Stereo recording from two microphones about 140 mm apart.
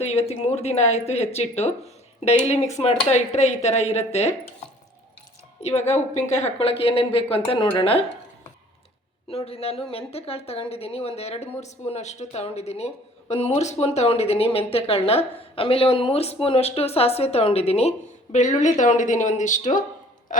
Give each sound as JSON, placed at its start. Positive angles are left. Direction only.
{"t": 0.0, "sound": "speech", "side_deg": 50}
{"t": 2.7, "sound": "speech", "side_deg": 50}
{"t": 5.6, "sound": "speech", "side_deg": 50}
{"t": 9.3, "sound": "speech", "side_deg": 45}
{"t": 20.3, "sound": "a sound", "side_deg": 70}